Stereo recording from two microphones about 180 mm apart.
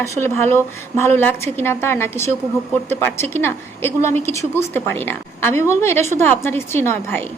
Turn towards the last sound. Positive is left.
turn(degrees=15)  # may be behind; listen again after turning